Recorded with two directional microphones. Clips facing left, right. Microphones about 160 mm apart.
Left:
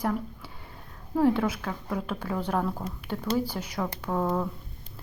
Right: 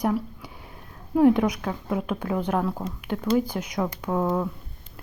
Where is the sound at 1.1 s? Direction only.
15° right (ahead or behind).